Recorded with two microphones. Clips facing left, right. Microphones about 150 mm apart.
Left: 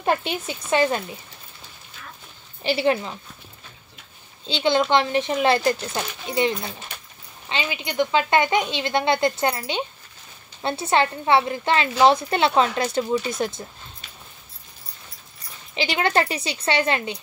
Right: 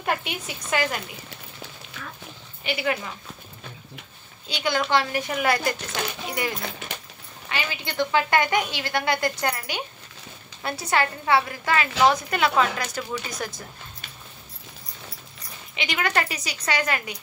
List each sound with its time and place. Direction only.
0.0 s a woman's voice: 30° left (ahead or behind)
2.6 s a woman's voice: 30° left (ahead or behind)
4.5 s a woman's voice: 25° left (ahead or behind)
7.4 s a woman's voice: 20° left (ahead or behind)
15.7 s a woman's voice: 30° left (ahead or behind)